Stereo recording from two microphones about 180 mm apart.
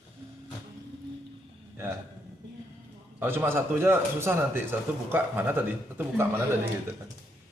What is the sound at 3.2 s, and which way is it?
A man's voice, 10° right (ahead or behind).